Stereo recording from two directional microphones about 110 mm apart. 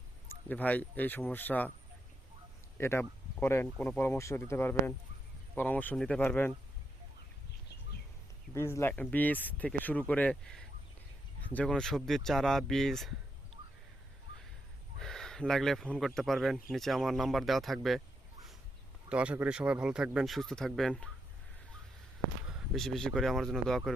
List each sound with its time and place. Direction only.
0.4 s speech: 15° left (ahead or behind)
2.7 s speech: 20° left (ahead or behind)
8.5 s speech: 25° left (ahead or behind); by 13.1 s 5° left (ahead or behind)
14.9 s speech: 5° left (ahead or behind)
19.0 s speech: 10° right (ahead or behind); by 21.1 s 5° left (ahead or behind)
22.4 s speech: 5° right (ahead or behind)